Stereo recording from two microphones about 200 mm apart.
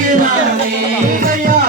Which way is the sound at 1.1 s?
45° right (ahead or behind).